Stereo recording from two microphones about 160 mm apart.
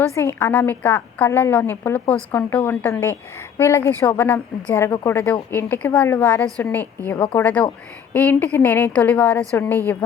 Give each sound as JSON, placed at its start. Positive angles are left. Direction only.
{"t": 0.2, "sound": "a woman's voice", "side_deg": 15}